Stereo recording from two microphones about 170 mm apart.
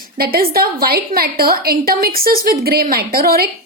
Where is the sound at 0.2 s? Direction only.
60° right (ahead or behind).